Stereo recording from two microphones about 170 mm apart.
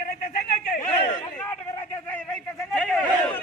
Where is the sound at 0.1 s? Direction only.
60° left (ahead or behind).